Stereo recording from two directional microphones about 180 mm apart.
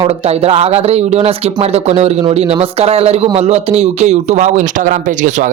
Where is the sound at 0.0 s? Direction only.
35° right (ahead or behind).